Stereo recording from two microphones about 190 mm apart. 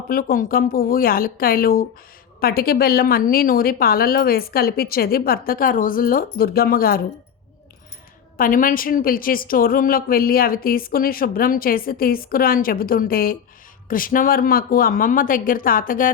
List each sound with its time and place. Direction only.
0.1 s a woman's voice: 50° left (ahead or behind)
8.4 s a woman's voice: 45° left (ahead or behind)